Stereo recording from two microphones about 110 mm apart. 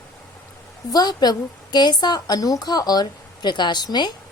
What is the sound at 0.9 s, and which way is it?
A woman's voice, 40° left (ahead or behind).